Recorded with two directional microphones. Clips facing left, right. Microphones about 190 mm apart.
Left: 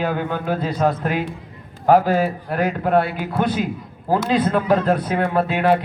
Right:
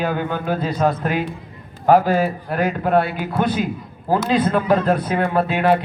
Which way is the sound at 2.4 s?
40° left (ahead or behind).